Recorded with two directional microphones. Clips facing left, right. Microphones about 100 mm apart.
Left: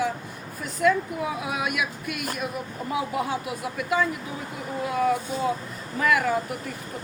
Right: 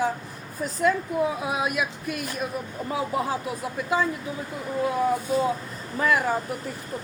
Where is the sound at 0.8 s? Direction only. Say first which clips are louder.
Even; 30° right (ahead or behind).